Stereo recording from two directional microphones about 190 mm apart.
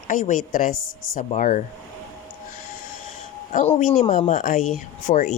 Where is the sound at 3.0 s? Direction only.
40° left (ahead or behind).